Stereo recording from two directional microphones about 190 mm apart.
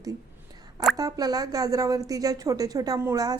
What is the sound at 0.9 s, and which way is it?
A woman's voice, 20° right (ahead or behind).